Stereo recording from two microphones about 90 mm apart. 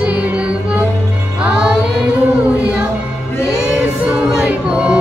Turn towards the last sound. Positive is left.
turn(degrees=-15)  # may be behind; listen again after turning